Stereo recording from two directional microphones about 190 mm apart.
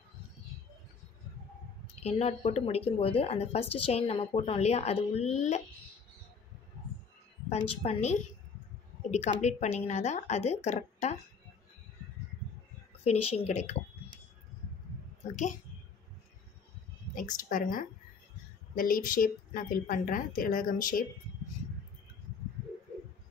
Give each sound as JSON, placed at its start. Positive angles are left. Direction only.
{"t": 2.0, "sound": "speech", "side_deg": 35}
{"t": 7.4, "sound": "speech", "side_deg": 35}
{"t": 13.0, "sound": "speech", "side_deg": 35}
{"t": 17.1, "sound": "a woman's voice", "side_deg": 45}